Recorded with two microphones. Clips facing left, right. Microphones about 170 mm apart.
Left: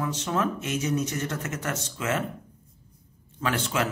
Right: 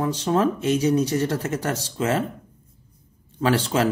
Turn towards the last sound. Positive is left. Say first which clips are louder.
# right 6 dB
turn(degrees=-35)  # may be behind; listen again after turning